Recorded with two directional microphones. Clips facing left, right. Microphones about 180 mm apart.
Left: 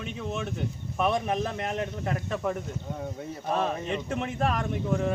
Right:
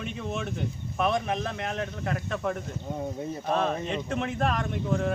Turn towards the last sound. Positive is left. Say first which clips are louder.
# even
turn(degrees=5)  # may be behind; listen again after turning